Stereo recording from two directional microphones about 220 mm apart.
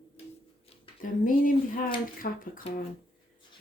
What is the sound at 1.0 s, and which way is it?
Speech, 40° left (ahead or behind).